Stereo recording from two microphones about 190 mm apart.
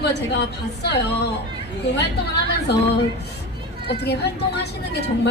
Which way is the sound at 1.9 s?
60° left (ahead or behind).